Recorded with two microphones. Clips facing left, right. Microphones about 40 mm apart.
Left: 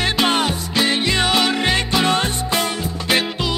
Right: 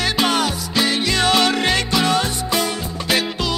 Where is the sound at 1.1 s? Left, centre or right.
Centre.